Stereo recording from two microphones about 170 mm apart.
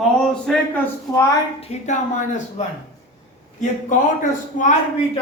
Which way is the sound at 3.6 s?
50° left (ahead or behind).